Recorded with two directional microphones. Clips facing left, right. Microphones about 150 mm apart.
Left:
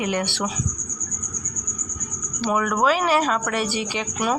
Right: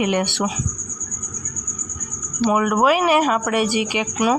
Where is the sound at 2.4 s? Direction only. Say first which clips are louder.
Right 4 dB; 15° right (ahead or behind).